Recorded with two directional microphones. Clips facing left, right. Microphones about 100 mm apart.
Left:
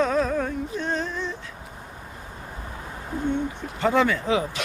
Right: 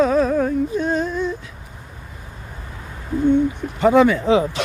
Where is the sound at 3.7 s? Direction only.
15° right (ahead or behind).